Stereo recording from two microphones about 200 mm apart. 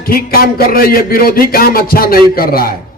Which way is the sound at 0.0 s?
45° left (ahead or behind).